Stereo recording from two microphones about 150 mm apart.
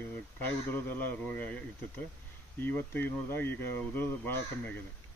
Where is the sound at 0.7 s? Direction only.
10° left (ahead or behind).